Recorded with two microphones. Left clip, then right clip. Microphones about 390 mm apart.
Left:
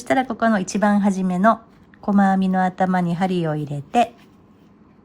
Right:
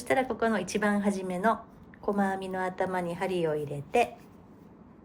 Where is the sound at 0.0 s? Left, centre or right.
Centre.